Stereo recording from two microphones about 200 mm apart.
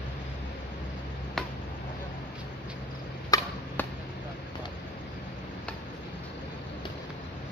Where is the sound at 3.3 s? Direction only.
15° left (ahead or behind).